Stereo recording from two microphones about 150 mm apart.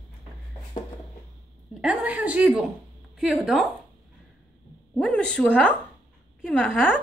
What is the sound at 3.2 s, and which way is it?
Speech, centre (ahead or behind).